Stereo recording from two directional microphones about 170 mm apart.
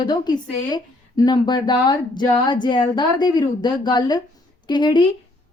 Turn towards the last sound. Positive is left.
turn(degrees=25)  # may be behind; listen again after turning